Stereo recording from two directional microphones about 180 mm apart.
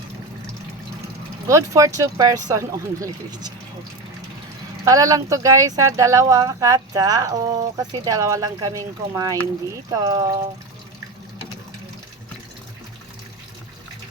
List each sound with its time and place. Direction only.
1.5 s speech: 15° right (ahead or behind)
4.9 s speech: 20° right (ahead or behind)